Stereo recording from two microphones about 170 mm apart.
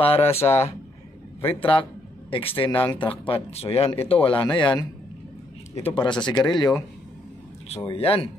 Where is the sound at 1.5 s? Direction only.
30° left (ahead or behind).